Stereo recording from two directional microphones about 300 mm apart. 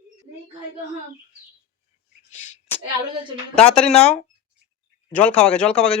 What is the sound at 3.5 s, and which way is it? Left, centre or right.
Speech, centre.